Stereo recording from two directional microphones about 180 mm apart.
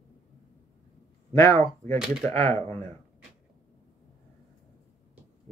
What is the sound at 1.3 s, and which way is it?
Speech, 15° left (ahead or behind).